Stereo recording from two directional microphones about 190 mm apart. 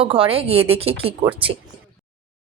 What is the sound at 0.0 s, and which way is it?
A woman's voice, 30° right (ahead or behind).